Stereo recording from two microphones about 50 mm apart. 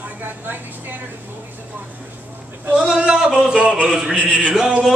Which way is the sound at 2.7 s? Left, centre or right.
Centre.